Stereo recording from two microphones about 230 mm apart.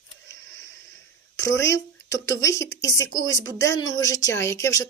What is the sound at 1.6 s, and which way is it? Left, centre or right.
A woman's voice, centre.